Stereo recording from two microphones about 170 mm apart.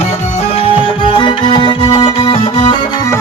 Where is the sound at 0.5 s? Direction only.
30° left (ahead or behind).